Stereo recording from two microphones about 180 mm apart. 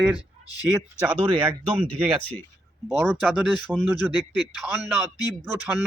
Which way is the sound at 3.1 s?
Centre (ahead or behind).